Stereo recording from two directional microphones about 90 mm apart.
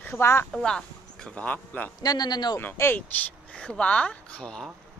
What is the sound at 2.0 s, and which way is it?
Speech, 50° left (ahead or behind).